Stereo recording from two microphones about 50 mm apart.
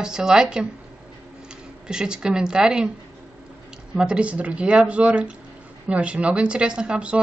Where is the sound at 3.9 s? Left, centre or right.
Centre.